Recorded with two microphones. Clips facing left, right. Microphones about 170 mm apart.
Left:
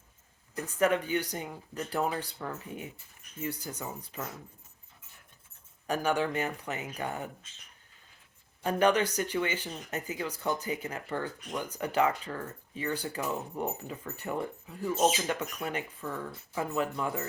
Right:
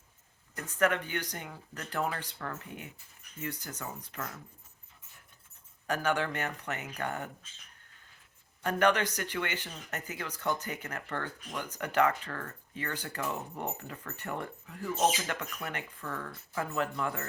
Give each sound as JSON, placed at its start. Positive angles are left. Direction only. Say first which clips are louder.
{"t": 0.5, "sound": "speech", "louder": "left 2 dB", "side_deg": 15}
{"t": 5.9, "sound": "speech", "louder": "left 2 dB", "side_deg": 15}
{"t": 8.6, "sound": "speech", "louder": "left 2 dB", "side_deg": 15}